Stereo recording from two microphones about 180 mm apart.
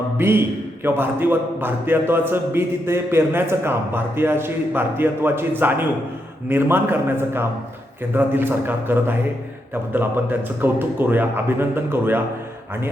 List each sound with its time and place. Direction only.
0.2 s a man's voice: 10° right (ahead or behind)